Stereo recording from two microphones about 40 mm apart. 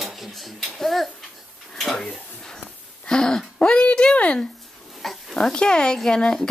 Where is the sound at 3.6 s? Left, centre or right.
Left.